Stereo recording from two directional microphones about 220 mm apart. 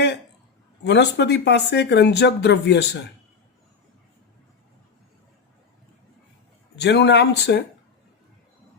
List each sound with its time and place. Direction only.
0.9 s speech: 50° left (ahead or behind)
6.7 s speech: 50° left (ahead or behind)